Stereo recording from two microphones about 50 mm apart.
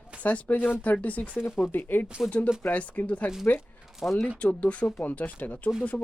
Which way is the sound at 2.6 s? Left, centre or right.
Left.